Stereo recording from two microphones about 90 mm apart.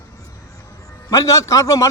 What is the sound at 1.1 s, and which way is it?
Speech, 35° left (ahead or behind).